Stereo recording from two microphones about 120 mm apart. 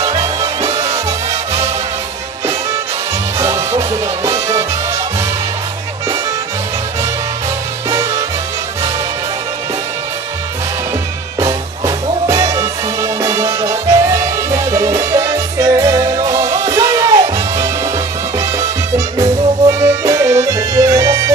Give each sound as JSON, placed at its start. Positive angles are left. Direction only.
{"t": 0.7, "sound": "music", "side_deg": -25}
{"t": 3.3, "sound": "music", "side_deg": -25}
{"t": 7.9, "sound": "music", "side_deg": -25}
{"t": 11.3, "sound": "music", "side_deg": -25}